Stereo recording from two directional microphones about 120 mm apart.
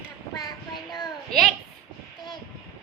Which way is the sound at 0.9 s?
Centre (ahead or behind).